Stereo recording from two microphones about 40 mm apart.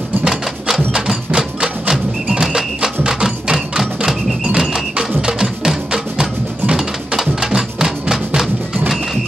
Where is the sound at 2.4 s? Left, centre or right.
Centre.